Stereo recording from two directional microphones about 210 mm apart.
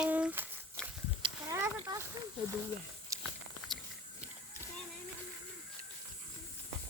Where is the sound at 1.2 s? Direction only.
25° right (ahead or behind).